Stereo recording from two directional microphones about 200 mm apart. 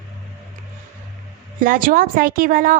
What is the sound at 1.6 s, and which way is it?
A woman's voice, 45° right (ahead or behind).